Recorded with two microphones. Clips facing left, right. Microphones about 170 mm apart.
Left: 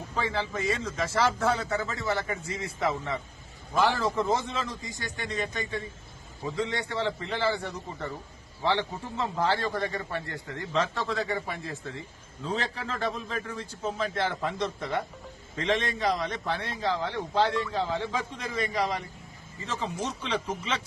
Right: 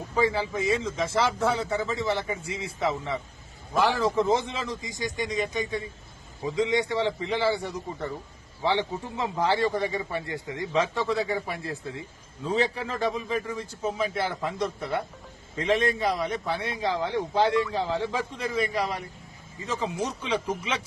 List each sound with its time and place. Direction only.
0.2 s a man's voice: 10° right (ahead or behind)